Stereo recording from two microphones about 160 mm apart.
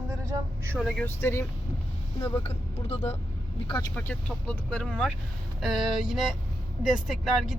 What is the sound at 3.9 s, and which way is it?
Speech, 10° left (ahead or behind).